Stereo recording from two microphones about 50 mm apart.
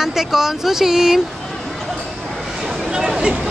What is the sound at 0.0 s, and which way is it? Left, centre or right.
Speech, centre.